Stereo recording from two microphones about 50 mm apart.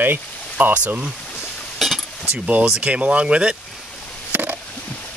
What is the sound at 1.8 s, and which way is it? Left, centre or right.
Cutlery, centre.